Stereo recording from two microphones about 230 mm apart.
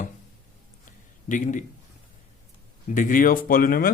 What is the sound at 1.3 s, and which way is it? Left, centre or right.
Speech, left.